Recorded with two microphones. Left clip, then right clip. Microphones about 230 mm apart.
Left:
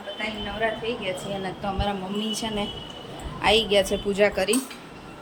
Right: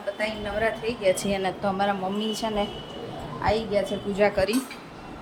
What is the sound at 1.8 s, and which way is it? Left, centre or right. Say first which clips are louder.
Speech: right 3 dB; centre.